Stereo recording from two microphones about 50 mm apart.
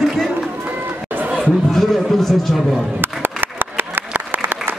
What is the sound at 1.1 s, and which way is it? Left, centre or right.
Chatter, right.